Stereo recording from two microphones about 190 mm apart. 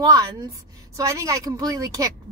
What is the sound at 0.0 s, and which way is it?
Speech, 20° right (ahead or behind).